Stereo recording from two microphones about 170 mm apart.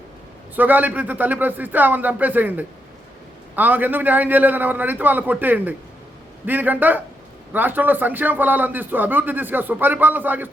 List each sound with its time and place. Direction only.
0.5 s a man's voice: 10° right (ahead or behind)